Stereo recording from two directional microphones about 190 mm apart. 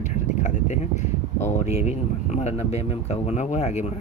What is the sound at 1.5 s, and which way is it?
Speech, 35° left (ahead or behind).